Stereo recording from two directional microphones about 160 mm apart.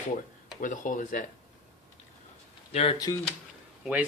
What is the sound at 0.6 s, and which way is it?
Speech, 55° left (ahead or behind).